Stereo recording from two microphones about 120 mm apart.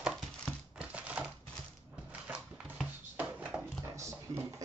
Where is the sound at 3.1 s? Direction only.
10° right (ahead or behind).